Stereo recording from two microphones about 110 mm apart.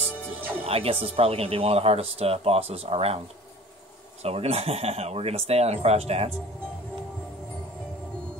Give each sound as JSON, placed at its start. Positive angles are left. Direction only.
{"t": 0.6, "sound": "speech", "side_deg": -60}
{"t": 4.2, "sound": "speech", "side_deg": -65}